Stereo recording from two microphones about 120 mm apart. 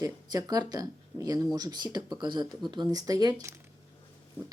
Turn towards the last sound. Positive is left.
turn(degrees=-30)  # may be behind; listen again after turning